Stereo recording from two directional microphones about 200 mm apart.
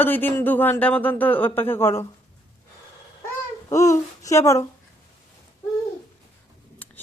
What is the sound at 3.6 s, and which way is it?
Speech, 15° left (ahead or behind).